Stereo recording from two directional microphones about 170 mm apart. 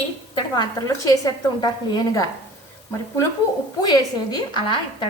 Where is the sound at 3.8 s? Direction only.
25° left (ahead or behind).